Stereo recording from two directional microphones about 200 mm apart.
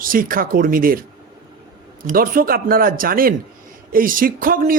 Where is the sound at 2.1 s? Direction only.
45° right (ahead or behind).